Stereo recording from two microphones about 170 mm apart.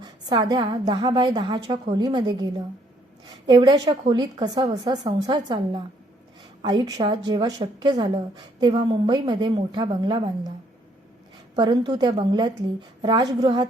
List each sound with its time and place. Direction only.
0.0 s a woman's voice: 25° right (ahead or behind)
11.5 s a woman's voice: 25° right (ahead or behind)